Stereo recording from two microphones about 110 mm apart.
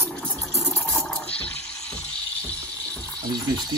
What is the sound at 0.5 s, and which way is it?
Toilet flush, 20° left (ahead or behind).